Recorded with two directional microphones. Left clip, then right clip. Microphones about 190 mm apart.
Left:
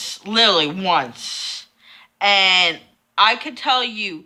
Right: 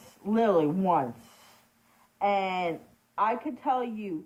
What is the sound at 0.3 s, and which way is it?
Speech, 10° left (ahead or behind).